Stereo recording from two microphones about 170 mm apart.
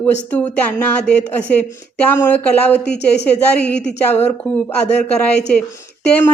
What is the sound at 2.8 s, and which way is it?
Speech, 80° left.